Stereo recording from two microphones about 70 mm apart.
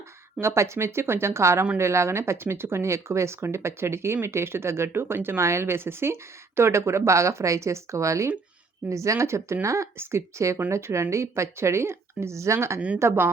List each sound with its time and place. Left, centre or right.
0.3 s speech: right